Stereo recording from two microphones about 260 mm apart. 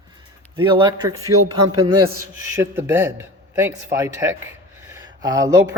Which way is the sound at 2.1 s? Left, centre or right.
Right.